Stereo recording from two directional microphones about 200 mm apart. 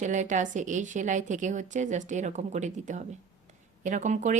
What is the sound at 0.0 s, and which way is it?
A woman's voice, 40° right (ahead or behind).